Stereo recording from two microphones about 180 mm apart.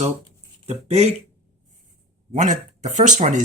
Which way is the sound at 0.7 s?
35° right (ahead or behind).